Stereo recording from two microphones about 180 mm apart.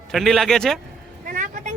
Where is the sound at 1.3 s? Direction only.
45° right (ahead or behind).